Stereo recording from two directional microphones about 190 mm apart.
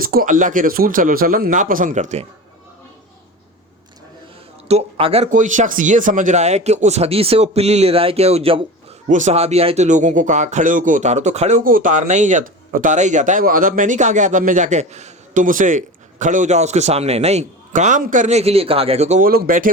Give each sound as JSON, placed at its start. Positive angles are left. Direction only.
{"t": 0.0, "sound": "speech", "side_deg": -50}
{"t": 4.7, "sound": "speech", "side_deg": -30}
{"t": 19.3, "sound": "speech", "side_deg": -50}